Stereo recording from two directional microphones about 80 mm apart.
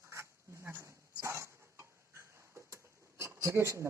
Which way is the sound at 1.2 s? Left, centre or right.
Right.